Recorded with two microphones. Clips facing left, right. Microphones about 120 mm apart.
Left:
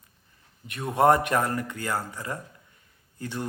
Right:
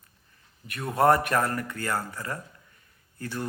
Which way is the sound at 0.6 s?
20° left (ahead or behind).